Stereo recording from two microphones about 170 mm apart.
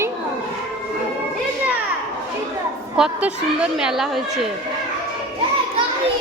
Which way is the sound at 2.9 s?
5° right (ahead or behind).